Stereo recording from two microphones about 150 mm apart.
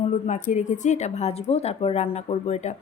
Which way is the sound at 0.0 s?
50° left (ahead or behind).